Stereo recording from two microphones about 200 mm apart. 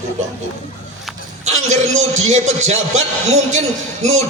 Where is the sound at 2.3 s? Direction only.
35° right (ahead or behind).